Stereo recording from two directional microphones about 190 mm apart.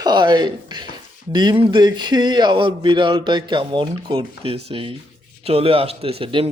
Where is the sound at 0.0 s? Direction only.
20° right (ahead or behind).